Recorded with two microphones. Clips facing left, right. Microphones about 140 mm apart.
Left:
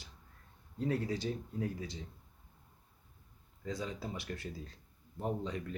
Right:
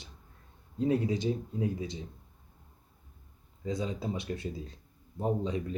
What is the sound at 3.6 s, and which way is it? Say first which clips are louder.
Speech: right 6 dB; 20° right (ahead or behind).